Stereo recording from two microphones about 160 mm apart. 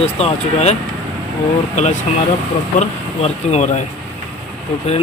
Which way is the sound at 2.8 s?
45° left (ahead or behind).